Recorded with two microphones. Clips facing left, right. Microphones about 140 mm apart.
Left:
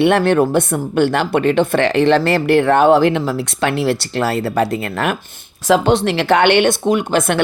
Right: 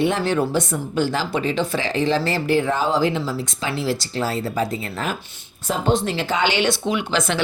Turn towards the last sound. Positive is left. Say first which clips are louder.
# left 6 dB
turn(degrees=55)  # may be behind; listen again after turning